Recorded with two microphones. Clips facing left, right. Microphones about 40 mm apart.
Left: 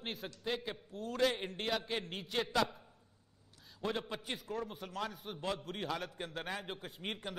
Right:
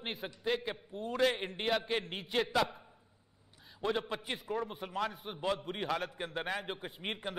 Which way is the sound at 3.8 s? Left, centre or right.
Centre.